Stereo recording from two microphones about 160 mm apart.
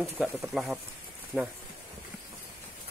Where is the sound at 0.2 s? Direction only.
Centre (ahead or behind).